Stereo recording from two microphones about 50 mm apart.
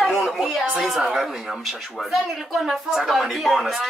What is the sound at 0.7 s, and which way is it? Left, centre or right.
Speech, centre.